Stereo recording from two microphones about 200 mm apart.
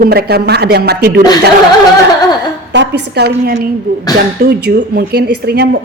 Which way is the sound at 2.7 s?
55° right (ahead or behind).